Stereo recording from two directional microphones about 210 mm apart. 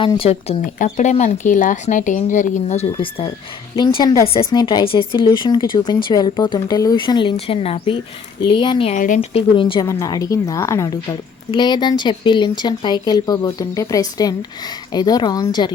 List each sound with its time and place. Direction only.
0.0 s speech: 25° left (ahead or behind)
9.0 s speech: 35° left (ahead or behind)
9.6 s a woman's voice: 25° left (ahead or behind)